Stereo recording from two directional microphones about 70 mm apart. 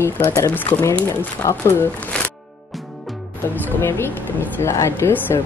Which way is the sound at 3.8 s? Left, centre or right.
Left.